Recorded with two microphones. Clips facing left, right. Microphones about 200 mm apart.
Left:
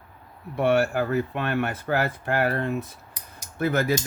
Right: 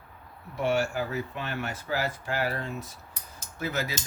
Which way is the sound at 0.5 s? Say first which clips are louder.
Left 6 dB; 60° left (ahead or behind).